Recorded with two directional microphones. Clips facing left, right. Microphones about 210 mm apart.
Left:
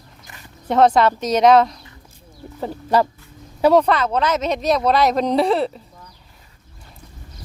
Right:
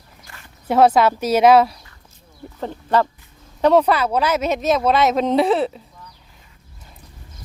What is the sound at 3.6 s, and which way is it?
Speech, centre (ahead or behind).